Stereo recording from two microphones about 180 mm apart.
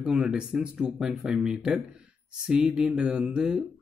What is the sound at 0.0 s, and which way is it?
Speech, 5° right (ahead or behind).